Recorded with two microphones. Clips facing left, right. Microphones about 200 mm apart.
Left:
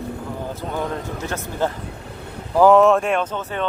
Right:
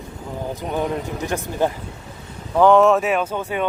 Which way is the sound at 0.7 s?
15° right (ahead or behind).